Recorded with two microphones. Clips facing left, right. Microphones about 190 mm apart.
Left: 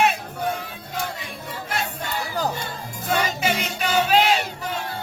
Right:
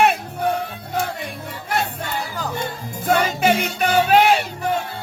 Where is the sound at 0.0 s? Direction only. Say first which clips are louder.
Right 4 dB; 60° right (ahead or behind).